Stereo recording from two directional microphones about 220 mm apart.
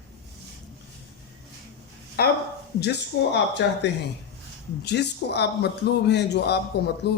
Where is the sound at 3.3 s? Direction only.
50° left (ahead or behind).